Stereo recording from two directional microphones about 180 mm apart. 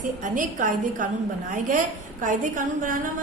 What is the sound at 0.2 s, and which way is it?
A woman's voice, 45° right (ahead or behind).